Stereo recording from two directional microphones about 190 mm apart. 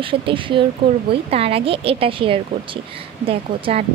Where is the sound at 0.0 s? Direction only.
25° right (ahead or behind).